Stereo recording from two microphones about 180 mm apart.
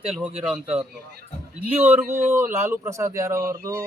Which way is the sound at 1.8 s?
10° right (ahead or behind).